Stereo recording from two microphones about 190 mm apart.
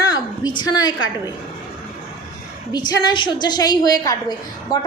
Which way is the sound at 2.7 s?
20° left (ahead or behind).